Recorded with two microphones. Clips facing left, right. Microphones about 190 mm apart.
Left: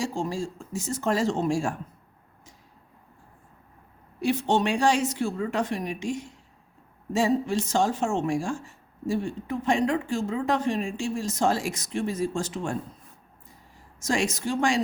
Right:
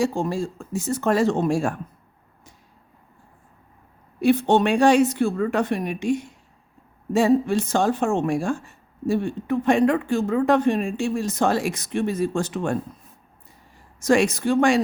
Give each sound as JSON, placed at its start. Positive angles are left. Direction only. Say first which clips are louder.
{"t": 0.0, "sound": "speech", "louder": "right 6 dB", "side_deg": -55}
{"t": 4.2, "sound": "speech", "louder": "right 6 dB", "side_deg": -60}
{"t": 14.0, "sound": "speech", "louder": "right 8 dB", "side_deg": -60}